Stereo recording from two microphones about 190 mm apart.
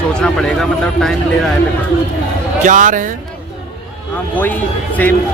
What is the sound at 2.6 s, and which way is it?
Speech, 40° right (ahead or behind).